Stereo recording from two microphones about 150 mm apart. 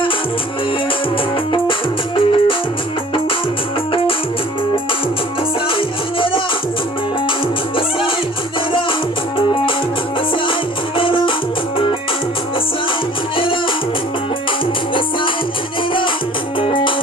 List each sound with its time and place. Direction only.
2.1 s music: 35° left (ahead or behind)
6.1 s music: 35° left (ahead or behind)
10.9 s music: 35° left (ahead or behind)
13.3 s music: 35° left (ahead or behind)
16.6 s music: 35° left (ahead or behind)